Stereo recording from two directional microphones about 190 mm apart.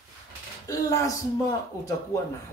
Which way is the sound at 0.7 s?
15° left (ahead or behind).